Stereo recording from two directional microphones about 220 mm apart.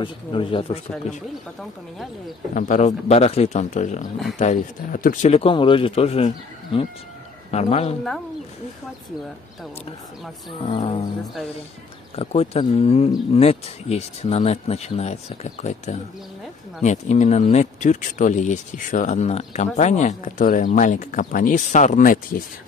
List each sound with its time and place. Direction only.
0.0 s speech: 25° left (ahead or behind)
2.5 s speech: 35° left (ahead or behind)
10.7 s speech: 25° left (ahead or behind)
12.2 s speech: 30° left (ahead or behind)